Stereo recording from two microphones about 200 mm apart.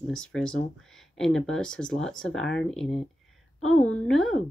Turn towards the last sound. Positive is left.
turn(degrees=0)  # may be behind; listen again after turning